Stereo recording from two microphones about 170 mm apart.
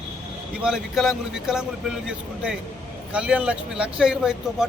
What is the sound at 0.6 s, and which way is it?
Speech, 5° right (ahead or behind).